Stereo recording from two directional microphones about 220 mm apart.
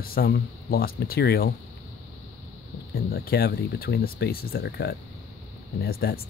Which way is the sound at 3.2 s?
45° left (ahead or behind).